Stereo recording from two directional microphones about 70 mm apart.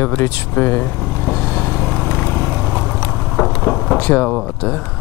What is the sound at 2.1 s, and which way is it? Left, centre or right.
Vehicle, left.